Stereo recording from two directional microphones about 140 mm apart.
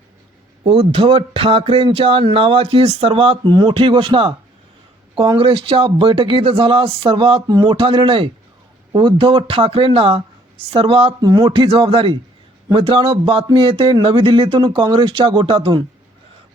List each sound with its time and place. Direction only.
0.6 s speech: 45° right (ahead or behind)
11.2 s speech: 30° right (ahead or behind)